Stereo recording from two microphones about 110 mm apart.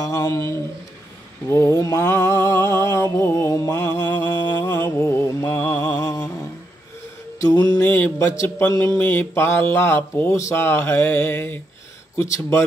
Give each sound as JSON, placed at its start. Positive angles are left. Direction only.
{"t": 0.0, "sound": "mantra", "side_deg": 30}
{"t": 4.4, "sound": "mantra", "side_deg": 40}
{"t": 4.9, "sound": "mantra", "side_deg": 25}
{"t": 5.9, "sound": "music", "side_deg": 30}
{"t": 7.8, "sound": "a sound", "side_deg": 20}
{"t": 8.2, "sound": "mantra", "side_deg": 30}